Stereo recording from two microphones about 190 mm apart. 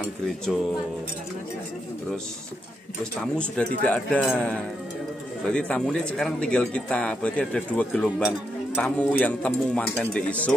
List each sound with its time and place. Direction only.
3.0 s speech: 5° left (ahead or behind)